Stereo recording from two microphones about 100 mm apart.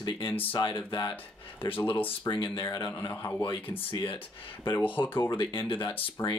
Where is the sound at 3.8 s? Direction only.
60° left (ahead or behind).